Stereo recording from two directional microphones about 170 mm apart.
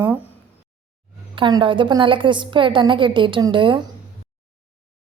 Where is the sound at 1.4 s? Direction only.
25° right (ahead or behind).